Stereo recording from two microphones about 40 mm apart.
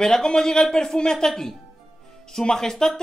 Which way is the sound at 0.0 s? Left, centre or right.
Centre.